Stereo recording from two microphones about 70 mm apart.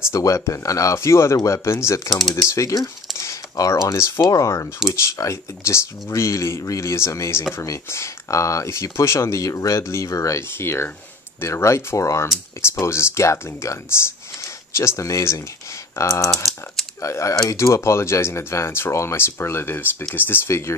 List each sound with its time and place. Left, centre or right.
0.0 s speech: left
0.9 s speech: left
2.0 s speech: centre
2.4 s speech: left
10.6 s speech: left